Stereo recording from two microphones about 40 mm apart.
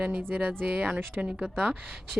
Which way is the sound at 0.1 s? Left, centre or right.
Right.